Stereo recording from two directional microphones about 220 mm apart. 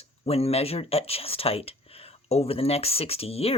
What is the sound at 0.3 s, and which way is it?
Speech, 25° left (ahead or behind).